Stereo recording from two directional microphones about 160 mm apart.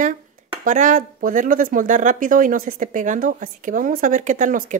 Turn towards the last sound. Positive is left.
turn(degrees=-55)  # may be behind; listen again after turning